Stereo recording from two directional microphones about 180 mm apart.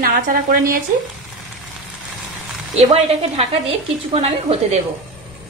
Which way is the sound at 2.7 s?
35° right (ahead or behind).